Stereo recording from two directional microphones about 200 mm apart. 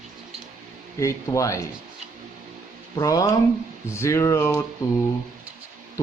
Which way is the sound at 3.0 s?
15° left (ahead or behind).